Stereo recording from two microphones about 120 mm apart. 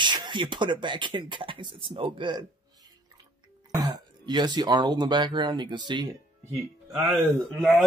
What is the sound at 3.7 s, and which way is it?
Speech, 35° right (ahead or behind).